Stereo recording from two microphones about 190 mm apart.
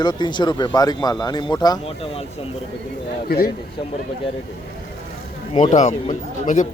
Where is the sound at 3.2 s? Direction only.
55° left (ahead or behind).